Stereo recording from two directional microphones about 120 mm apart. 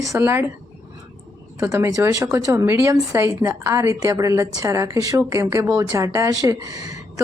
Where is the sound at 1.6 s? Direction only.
25° right (ahead or behind).